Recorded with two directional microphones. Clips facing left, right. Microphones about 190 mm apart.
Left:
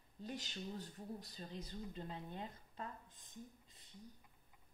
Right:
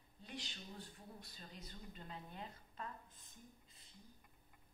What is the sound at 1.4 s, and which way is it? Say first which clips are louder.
A woman's voice: left 7 dB; 30° left (ahead or behind).